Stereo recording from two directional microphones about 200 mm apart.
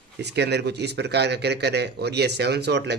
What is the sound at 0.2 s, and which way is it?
Speech, 55° right (ahead or behind).